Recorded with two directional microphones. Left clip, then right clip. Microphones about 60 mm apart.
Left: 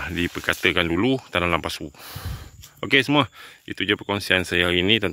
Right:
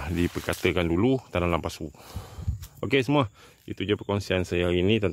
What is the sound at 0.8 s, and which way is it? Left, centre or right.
Speech, centre.